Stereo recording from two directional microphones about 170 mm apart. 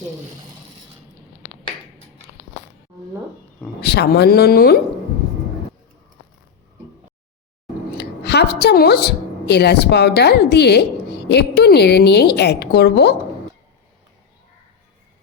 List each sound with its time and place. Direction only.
3.8 s a woman's voice: 70° left (ahead or behind)
7.9 s a woman's voice: 75° left (ahead or behind)